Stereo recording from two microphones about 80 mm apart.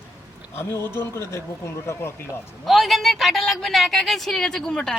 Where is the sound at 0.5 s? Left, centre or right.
Left.